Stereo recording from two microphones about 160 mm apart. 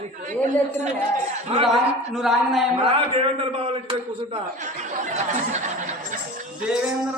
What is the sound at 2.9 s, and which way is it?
A man's voice, 35° right (ahead or behind).